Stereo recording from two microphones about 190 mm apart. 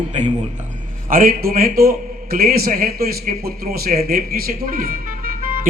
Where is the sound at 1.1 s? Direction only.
50° right (ahead or behind).